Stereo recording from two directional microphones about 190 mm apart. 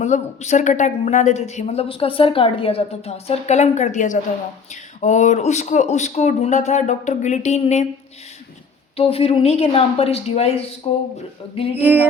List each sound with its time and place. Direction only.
0.0 s a woman's voice: 35° left (ahead or behind)
9.0 s a woman's voice: 30° left (ahead or behind)
11.8 s music: 10° right (ahead or behind)